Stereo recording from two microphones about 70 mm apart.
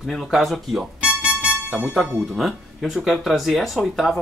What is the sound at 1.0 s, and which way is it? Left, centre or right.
Music, centre.